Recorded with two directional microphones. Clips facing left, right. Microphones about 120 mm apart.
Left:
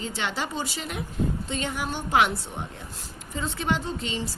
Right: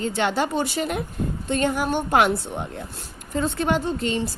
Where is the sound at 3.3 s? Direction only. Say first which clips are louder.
Right 5 dB; 55° right (ahead or behind).